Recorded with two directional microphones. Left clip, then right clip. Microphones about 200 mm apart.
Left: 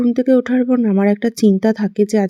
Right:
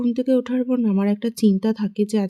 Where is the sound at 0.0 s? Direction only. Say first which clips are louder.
Left 6 dB; 10° left (ahead or behind).